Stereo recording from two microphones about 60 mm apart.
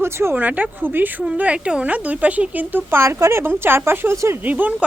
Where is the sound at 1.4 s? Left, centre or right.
Centre; by 4.1 s right.